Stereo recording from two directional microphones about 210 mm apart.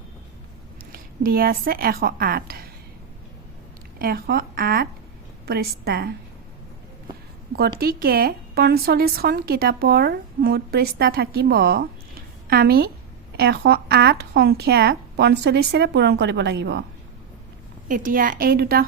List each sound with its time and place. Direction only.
0.9 s speech: 45° right (ahead or behind)
3.9 s speech: 45° right (ahead or behind)
7.5 s speech: 45° right (ahead or behind)
17.8 s speech: 40° right (ahead or behind)